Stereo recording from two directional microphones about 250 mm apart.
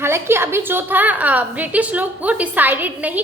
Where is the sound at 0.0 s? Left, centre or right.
Centre.